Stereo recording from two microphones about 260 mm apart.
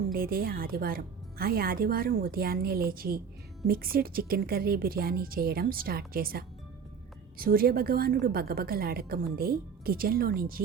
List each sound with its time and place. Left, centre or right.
0.1 s a woman's voice: right